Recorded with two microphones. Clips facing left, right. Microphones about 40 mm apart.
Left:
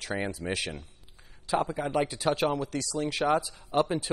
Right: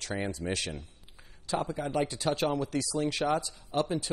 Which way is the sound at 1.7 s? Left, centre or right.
Left.